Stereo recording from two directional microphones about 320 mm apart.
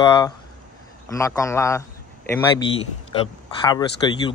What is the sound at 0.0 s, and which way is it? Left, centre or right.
A man's voice, centre.